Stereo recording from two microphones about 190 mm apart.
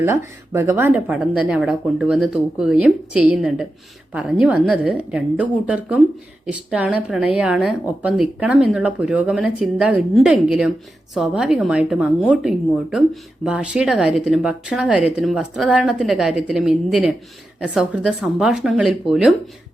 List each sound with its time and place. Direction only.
0.0 s speech: 15° right (ahead or behind)